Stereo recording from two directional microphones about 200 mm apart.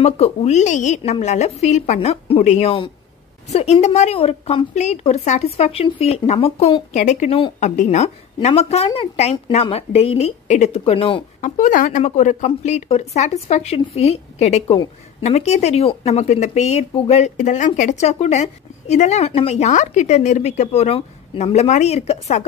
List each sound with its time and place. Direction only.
0.0 s speech: 30° left (ahead or behind)
11.4 s speech: 40° left (ahead or behind)